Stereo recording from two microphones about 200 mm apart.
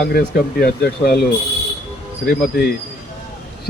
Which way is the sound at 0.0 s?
50° left (ahead or behind).